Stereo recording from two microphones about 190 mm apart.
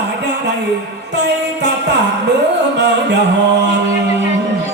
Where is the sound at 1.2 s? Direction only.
65° right (ahead or behind).